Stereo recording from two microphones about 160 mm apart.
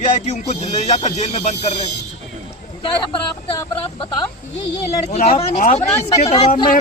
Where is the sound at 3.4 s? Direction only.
35° left (ahead or behind).